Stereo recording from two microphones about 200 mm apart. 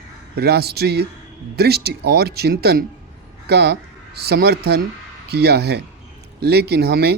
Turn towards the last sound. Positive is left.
turn(degrees=-50)  # may be behind; listen again after turning